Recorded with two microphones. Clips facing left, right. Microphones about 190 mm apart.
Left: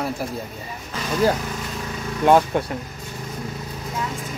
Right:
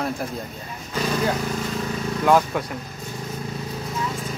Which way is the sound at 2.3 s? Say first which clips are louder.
Left 3 dB; 30° left (ahead or behind).